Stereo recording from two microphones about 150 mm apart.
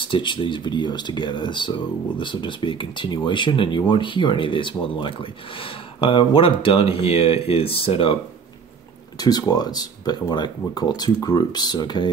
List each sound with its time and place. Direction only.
0.0 s speech: 35° left (ahead or behind)
9.2 s speech: 25° left (ahead or behind)